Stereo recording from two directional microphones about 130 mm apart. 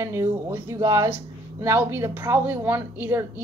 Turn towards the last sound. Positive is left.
turn(degrees=-15)  # may be behind; listen again after turning